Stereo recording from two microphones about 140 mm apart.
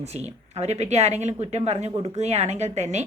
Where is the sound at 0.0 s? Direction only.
50° right (ahead or behind).